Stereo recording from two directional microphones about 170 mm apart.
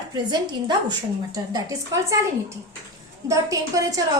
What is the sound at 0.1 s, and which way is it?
A woman's voice, 25° right (ahead or behind).